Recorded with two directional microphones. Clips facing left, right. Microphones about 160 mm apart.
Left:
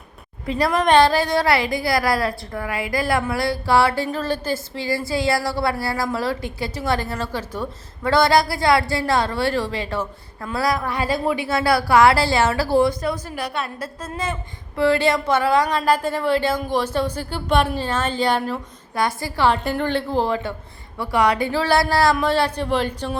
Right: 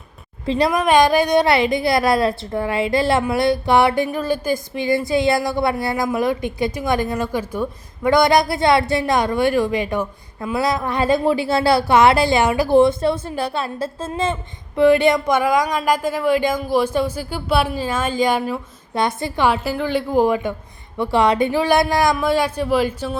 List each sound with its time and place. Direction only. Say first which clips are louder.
0.4 s a woman's voice: right 3 dB; 25° right (ahead or behind)
0.7 s a woman's voice: even; 10° right (ahead or behind)
18.9 s a woman's voice: right 2 dB; 20° right (ahead or behind)
19.5 s a woman's voice: left 1 dB; 5° right (ahead or behind)